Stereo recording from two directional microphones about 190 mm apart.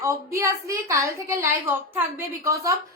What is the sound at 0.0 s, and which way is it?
A woman's voice, 15° right (ahead or behind).